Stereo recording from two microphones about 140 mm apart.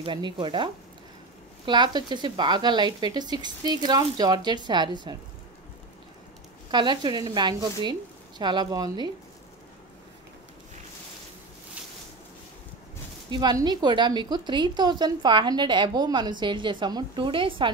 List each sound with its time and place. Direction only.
0.0 s a woman's voice: 35° right (ahead or behind)
1.7 s a woman's voice: 30° right (ahead or behind)
6.7 s a woman's voice: 35° right (ahead or behind)
13.3 s a woman's voice: 30° right (ahead or behind)